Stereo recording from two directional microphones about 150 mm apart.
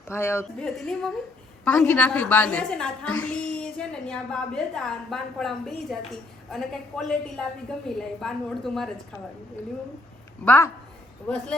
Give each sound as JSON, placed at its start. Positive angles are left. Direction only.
{"t": 0.1, "sound": "a woman's voice", "side_deg": 15}
{"t": 0.6, "sound": "a woman's voice", "side_deg": 5}
{"t": 10.4, "sound": "a woman's voice", "side_deg": 10}